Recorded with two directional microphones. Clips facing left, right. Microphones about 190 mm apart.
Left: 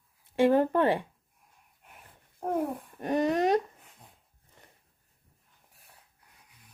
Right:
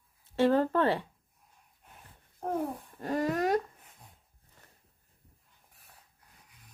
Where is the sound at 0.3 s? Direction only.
15° left (ahead or behind).